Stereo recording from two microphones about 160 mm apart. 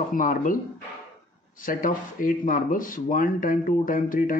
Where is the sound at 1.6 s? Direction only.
60° left (ahead or behind).